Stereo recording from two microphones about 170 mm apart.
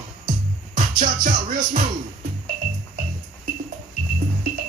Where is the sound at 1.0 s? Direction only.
55° right (ahead or behind).